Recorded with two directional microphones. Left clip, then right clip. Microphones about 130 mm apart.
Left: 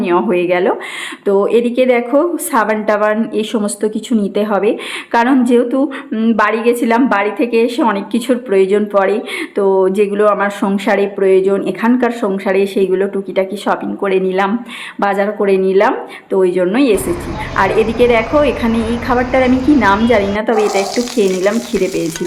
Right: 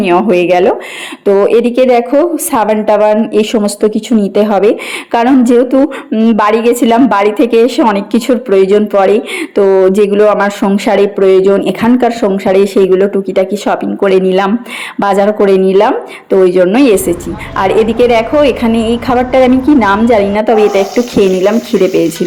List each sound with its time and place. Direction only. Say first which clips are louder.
0.3 s a woman's voice: right 5 dB; 30° right (ahead or behind)
6.4 s a woman's voice: right 4 dB; 40° right (ahead or behind)
14.9 s a woman's voice: right 6 dB; 50° right (ahead or behind)